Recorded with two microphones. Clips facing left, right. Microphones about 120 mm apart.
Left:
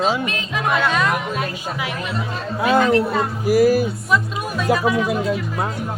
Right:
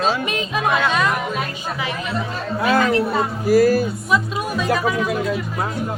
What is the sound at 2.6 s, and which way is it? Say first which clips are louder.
Speech: left 2 dB; 20° left (ahead or behind).